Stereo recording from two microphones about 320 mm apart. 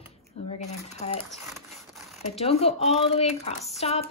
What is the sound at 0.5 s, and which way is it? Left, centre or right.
Speech, left.